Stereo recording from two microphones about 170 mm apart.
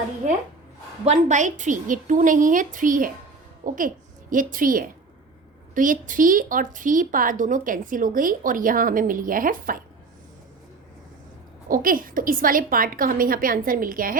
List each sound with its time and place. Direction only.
1.0 s a woman's voice: 45° right (ahead or behind)
11.7 s a woman's voice: 55° right (ahead or behind)